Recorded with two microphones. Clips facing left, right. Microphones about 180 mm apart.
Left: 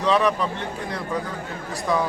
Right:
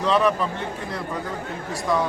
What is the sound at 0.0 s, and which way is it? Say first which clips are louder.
Speech: even; centre (ahead or behind).